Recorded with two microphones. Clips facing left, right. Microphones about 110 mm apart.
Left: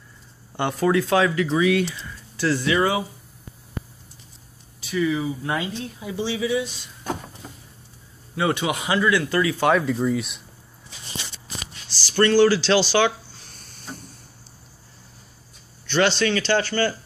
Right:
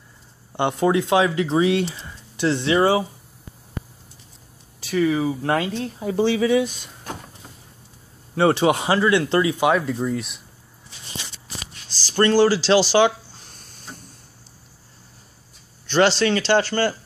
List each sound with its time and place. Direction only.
0.6 s speech: 25° right (ahead or behind)
4.9 s speech: 50° right (ahead or behind)
8.4 s speech: 35° right (ahead or behind)
9.6 s speech: 5° right (ahead or behind)
12.1 s speech: 35° right (ahead or behind)
15.9 s speech: 30° right (ahead or behind)